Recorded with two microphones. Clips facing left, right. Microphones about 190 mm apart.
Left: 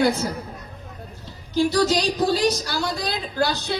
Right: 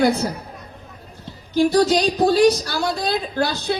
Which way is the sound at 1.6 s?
55° right (ahead or behind).